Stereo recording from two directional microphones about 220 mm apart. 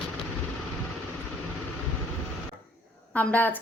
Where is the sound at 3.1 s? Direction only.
5° left (ahead or behind).